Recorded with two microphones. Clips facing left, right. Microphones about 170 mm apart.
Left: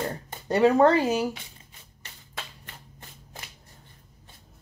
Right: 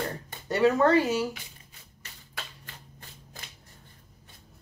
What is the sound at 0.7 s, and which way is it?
Speech, 30° left (ahead or behind).